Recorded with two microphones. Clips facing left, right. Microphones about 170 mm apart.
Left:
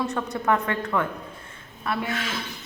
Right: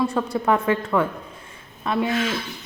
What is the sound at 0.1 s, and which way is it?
Speech, 10° right (ahead or behind).